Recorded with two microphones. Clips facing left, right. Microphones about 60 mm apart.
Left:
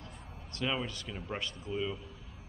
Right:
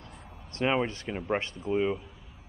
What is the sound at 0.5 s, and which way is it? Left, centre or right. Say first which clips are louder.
Speech: right 8 dB; right.